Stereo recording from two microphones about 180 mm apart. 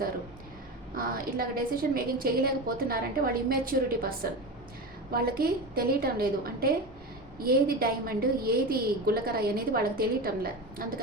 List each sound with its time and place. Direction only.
0.9 s a woman's voice: 55° right (ahead or behind)